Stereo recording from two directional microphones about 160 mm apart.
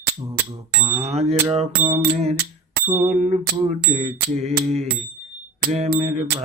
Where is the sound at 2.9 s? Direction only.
45° right (ahead or behind).